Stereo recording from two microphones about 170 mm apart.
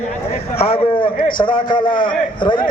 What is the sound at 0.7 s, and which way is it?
A man's voice, 30° left (ahead or behind).